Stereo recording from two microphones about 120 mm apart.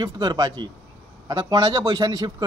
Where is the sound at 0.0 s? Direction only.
35° right (ahead or behind).